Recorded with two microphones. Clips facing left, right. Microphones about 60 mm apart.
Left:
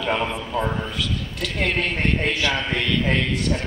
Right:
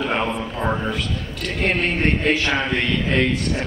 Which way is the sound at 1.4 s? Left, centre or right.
Right.